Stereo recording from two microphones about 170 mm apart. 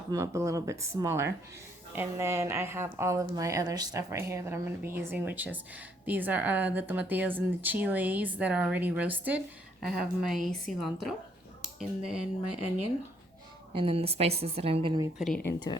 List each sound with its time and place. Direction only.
0.1 s a woman's voice: 20° right (ahead or behind)
13.7 s a woman's voice: 35° right (ahead or behind)
15.2 s a woman's voice: 5° left (ahead or behind)
15.5 s speech: 25° left (ahead or behind)